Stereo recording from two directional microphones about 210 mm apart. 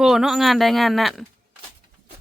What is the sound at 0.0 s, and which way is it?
Speech, centre (ahead or behind).